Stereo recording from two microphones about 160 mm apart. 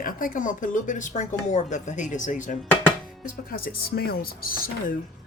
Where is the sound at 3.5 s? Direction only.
65° left (ahead or behind).